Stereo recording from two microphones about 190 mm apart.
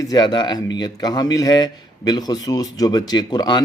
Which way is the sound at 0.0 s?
20° left (ahead or behind).